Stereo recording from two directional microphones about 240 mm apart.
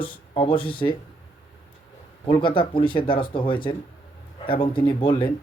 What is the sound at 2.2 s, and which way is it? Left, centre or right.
Speech, left.